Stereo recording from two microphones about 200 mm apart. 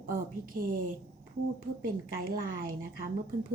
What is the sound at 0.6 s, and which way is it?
Speech, 45° right (ahead or behind).